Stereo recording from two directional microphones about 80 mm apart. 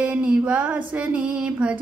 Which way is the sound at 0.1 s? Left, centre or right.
Centre.